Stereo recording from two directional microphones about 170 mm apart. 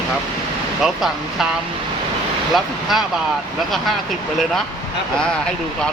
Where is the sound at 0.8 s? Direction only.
Centre (ahead or behind).